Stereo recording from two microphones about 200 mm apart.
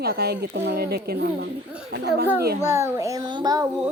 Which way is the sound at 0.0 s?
50° right (ahead or behind).